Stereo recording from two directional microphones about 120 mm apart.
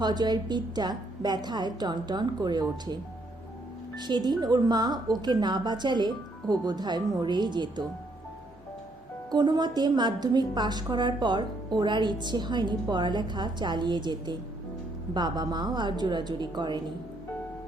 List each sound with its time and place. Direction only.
0.0 s a woman's voice: 35° right (ahead or behind)
9.3 s a woman's voice: 35° right (ahead or behind)